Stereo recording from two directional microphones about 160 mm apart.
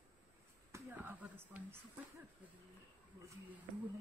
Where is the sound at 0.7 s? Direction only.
10° right (ahead or behind).